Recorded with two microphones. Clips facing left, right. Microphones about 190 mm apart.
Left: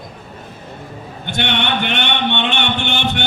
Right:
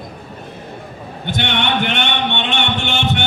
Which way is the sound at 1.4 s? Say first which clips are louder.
Even; 65° left (ahead or behind).